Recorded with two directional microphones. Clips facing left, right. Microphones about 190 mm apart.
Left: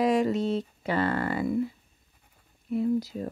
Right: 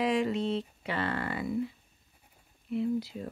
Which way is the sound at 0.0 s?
40° left (ahead or behind).